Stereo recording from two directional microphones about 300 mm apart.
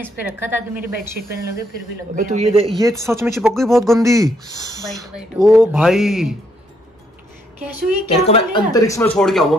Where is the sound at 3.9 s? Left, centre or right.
Centre.